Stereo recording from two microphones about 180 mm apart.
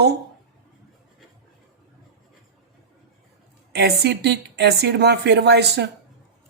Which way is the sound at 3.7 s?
65° right (ahead or behind).